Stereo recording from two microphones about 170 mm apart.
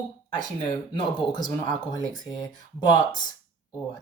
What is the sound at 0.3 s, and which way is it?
Speech, 25° left (ahead or behind).